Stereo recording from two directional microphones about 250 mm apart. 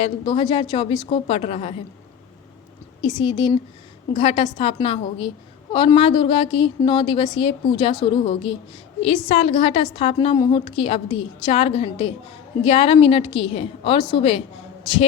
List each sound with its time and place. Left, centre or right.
0.0 s a woman's voice: centre
3.0 s a woman's voice: centre